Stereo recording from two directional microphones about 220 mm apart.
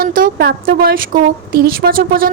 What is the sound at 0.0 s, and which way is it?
A woman's voice, 40° right (ahead or behind).